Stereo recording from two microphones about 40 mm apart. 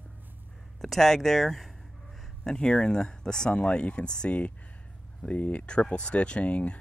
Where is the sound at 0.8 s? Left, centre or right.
Centre.